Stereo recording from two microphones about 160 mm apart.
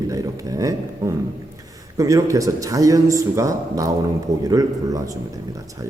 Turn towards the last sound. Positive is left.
turn(degrees=-20)  # may be behind; listen again after turning